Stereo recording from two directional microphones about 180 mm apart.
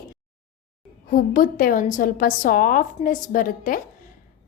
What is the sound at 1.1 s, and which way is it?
A woman's voice, 50° left (ahead or behind).